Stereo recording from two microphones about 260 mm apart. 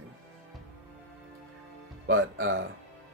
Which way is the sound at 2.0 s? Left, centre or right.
Right.